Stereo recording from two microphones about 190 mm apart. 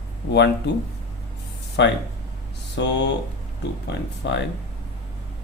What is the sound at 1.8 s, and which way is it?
Speech, 70° left (ahead or behind).